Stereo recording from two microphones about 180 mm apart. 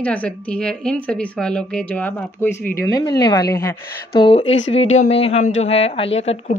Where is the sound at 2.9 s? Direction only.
20° left (ahead or behind).